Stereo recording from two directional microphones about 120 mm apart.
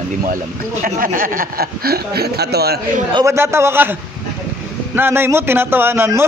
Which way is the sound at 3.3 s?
20° right (ahead or behind).